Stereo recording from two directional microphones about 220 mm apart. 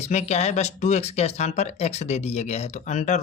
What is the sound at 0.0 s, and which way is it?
Speech, 30° left (ahead or behind).